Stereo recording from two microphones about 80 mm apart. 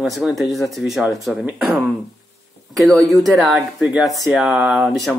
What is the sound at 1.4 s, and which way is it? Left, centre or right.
Speech, centre.